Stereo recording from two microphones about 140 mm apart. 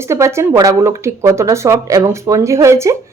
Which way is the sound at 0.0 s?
20° right (ahead or behind).